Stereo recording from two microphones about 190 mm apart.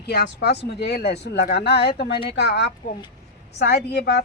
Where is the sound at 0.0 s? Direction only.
60° left (ahead or behind).